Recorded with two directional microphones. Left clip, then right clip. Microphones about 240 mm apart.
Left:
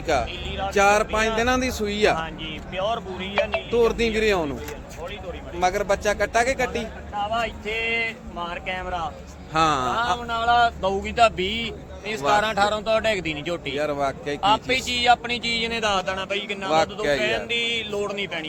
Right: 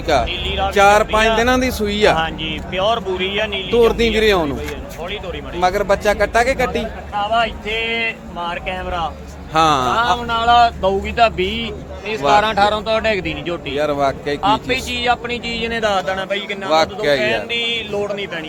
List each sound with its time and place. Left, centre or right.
0.1 s a man's voice: centre
0.4 s speech: right
0.7 s a man's voice: centre
2.1 s speech: right
3.7 s a man's voice: centre
5.5 s a man's voice: centre
9.5 s a man's voice: centre
10.8 s speech: left
13.7 s a man's voice: centre
14.4 s speech: left
16.6 s a man's voice: centre
17.2 s speech: left